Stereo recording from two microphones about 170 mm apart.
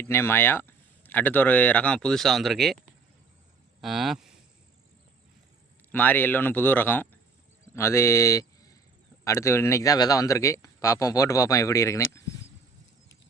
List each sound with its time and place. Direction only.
0.0 s speech: 15° left (ahead or behind)
3.8 s speech: centre (ahead or behind)
5.9 s speech: 10° left (ahead or behind)